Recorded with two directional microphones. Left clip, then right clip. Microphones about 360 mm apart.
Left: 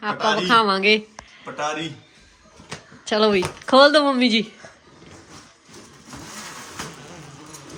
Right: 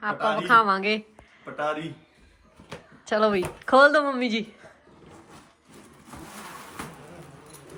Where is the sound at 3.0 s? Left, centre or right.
Centre.